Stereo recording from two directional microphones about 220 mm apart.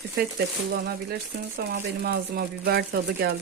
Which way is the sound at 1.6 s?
45° right (ahead or behind).